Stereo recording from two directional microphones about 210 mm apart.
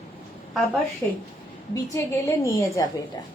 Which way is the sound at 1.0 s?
10° left (ahead or behind).